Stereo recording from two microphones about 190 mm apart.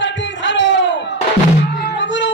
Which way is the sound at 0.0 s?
75° left (ahead or behind).